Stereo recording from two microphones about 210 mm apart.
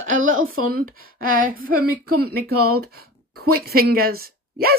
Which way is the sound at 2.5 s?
90° right.